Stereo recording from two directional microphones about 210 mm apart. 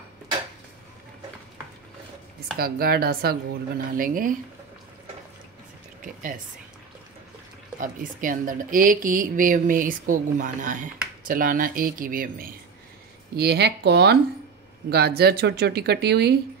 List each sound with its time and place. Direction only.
2.6 s a woman's voice: 45° right (ahead or behind)
7.8 s a woman's voice: 40° right (ahead or behind)